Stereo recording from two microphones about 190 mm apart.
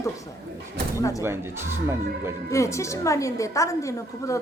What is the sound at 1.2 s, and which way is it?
Speech, 15° right (ahead or behind).